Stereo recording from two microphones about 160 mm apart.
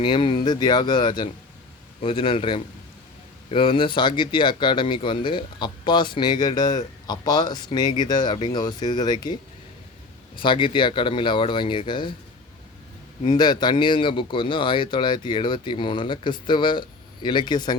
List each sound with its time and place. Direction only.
0.0 s speech: 30° left (ahead or behind)
10.3 s speech: 30° left (ahead or behind)
13.2 s speech: 30° left (ahead or behind)